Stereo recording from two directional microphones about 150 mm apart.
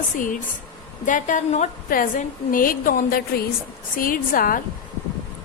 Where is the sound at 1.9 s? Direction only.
65° left (ahead or behind).